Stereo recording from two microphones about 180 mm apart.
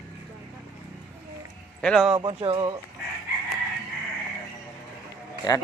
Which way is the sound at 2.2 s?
25° right (ahead or behind).